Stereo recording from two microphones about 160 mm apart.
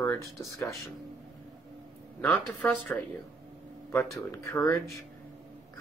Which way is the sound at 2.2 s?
10° left (ahead or behind).